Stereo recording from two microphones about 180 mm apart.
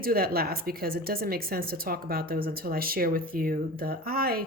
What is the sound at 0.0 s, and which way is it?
Speech, 55° right (ahead or behind).